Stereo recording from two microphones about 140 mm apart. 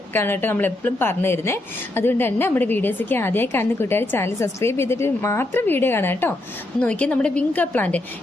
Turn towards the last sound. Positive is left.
turn(degrees=10)  # may be behind; listen again after turning